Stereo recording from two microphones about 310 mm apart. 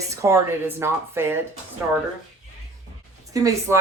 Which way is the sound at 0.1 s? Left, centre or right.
Centre.